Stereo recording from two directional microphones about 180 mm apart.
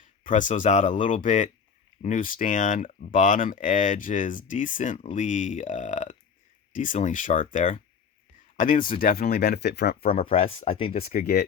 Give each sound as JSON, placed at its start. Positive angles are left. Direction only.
{"t": 0.3, "sound": "speech", "side_deg": 45}
{"t": 10.2, "sound": "speech", "side_deg": 30}
{"t": 11.1, "sound": "speech", "side_deg": 50}